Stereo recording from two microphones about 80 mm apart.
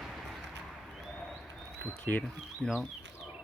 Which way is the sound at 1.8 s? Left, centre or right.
Left.